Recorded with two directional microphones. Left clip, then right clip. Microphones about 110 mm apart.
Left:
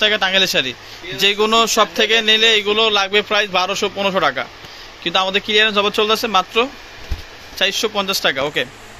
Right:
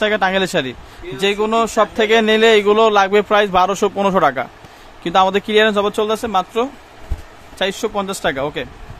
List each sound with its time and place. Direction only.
0.0 s speech: 45° right (ahead or behind)
1.2 s speech: 15° right (ahead or behind)
2.0 s a man's voice: 50° right (ahead or behind); by 3.2 s 90° right
3.2 s speech: 55° right (ahead or behind); by 4.2 s 75° right (ahead or behind)
4.2 s speech: 50° right (ahead or behind)
5.6 s speech: 35° right (ahead or behind)
7.7 s speech: 40° right (ahead or behind)